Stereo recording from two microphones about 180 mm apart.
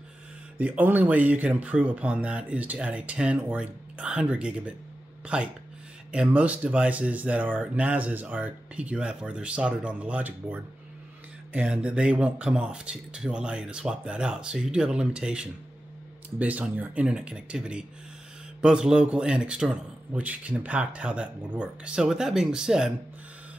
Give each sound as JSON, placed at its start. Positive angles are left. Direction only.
{"t": 0.6, "sound": "a man's voice", "side_deg": -10}